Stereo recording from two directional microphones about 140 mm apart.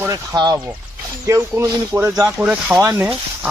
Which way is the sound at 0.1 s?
25° right (ahead or behind).